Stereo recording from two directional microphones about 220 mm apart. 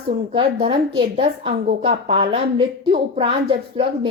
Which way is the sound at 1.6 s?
40° right (ahead or behind).